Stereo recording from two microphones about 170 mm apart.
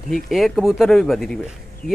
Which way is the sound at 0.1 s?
Centre (ahead or behind).